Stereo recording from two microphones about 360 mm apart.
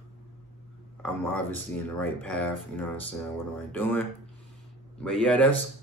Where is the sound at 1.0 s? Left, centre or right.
Centre.